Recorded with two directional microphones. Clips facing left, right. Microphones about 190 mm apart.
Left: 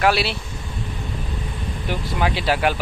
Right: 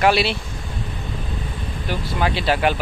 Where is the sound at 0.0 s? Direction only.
5° left (ahead or behind).